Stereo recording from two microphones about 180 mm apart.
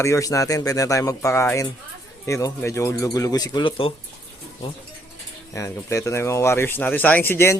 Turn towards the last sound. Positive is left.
turn(degrees=15)  # may be behind; listen again after turning